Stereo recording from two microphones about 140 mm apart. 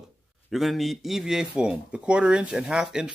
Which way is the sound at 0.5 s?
Centre (ahead or behind).